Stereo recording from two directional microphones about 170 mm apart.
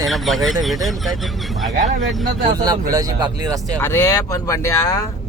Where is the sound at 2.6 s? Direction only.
20° right (ahead or behind).